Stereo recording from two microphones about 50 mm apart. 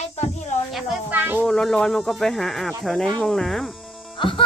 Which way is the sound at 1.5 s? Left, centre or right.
Centre.